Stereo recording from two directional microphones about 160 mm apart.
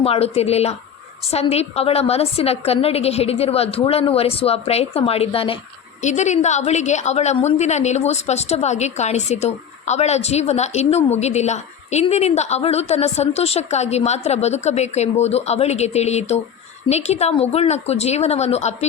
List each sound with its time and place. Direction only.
0.0 s a woman's voice: 40° left (ahead or behind)
6.0 s a woman's voice: 45° left (ahead or behind)